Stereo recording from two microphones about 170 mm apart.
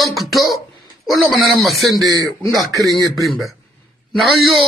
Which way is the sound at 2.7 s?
20° right (ahead or behind).